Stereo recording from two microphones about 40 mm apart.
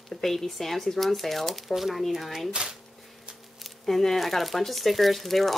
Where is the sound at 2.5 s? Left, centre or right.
Right.